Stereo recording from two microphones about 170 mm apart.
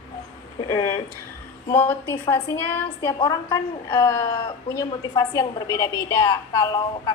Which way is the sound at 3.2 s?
25° left (ahead or behind).